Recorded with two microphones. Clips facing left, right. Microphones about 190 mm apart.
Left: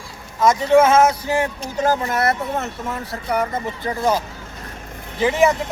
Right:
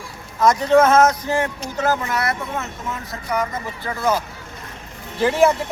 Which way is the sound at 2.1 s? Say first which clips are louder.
Left 3 dB; 50° left (ahead or behind).